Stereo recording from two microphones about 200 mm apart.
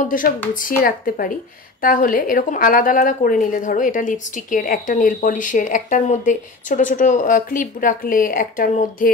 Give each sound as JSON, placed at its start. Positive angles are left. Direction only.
{"t": 0.0, "sound": "a woman's voice", "side_deg": 40}